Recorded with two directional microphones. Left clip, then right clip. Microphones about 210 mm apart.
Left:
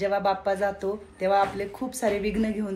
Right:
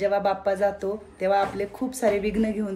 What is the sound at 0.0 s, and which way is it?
A woman's voice, 15° right (ahead or behind).